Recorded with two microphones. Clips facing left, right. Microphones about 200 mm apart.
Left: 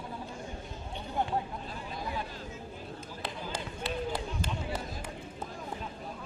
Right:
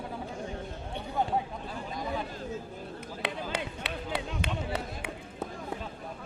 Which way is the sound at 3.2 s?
65° right (ahead or behind).